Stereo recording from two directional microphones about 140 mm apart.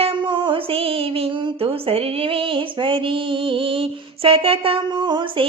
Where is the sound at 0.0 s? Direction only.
40° right (ahead or behind).